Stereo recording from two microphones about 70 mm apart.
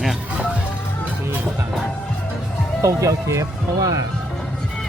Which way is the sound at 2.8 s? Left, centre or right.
Right.